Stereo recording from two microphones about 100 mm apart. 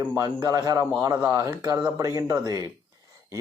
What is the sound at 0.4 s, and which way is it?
Speech, 35° right (ahead or behind).